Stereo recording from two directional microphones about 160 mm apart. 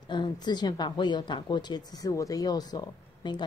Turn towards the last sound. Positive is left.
turn(degrees=25)  # may be behind; listen again after turning